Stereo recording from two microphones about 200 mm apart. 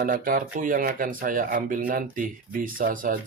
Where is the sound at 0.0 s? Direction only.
45° right (ahead or behind).